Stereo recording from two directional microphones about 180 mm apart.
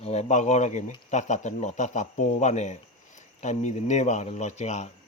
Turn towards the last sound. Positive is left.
turn(degrees=40)  # may be behind; listen again after turning